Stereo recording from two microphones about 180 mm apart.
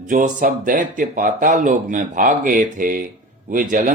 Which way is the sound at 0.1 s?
45° right (ahead or behind).